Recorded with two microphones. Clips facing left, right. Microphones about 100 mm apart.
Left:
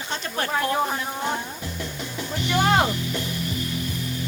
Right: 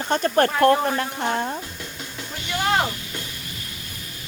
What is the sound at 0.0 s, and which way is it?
Speech, 50° right (ahead or behind).